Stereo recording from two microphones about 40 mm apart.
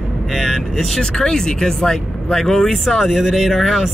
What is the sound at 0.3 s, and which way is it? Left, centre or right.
Vehicle, centre.